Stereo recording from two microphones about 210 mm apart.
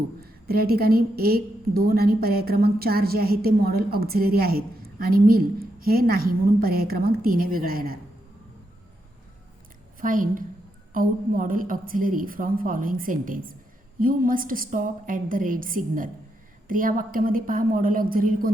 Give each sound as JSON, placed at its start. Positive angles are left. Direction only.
{"t": 0.2, "sound": "a woman's voice", "side_deg": -45}
{"t": 10.0, "sound": "a woman's voice", "side_deg": -40}